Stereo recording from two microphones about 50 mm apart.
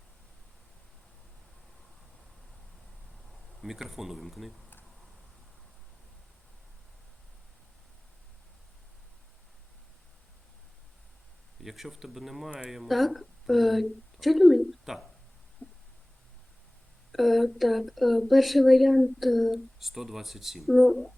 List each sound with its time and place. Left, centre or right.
3.6 s speech: centre
11.6 s a woman's voice: centre
15.6 s a sound: left
17.1 s speech: centre